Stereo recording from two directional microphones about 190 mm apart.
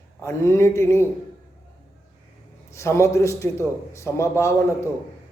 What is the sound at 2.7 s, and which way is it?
A man's voice, 15° left (ahead or behind).